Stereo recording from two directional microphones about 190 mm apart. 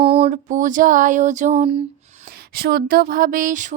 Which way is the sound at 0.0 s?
30° right (ahead or behind).